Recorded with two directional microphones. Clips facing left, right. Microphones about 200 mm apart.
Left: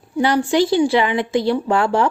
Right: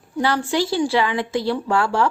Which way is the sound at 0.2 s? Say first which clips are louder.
Left 5 dB; 20° left (ahead or behind).